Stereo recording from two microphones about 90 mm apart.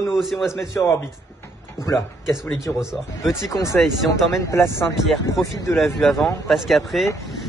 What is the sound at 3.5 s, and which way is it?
Speech, 35° left (ahead or behind).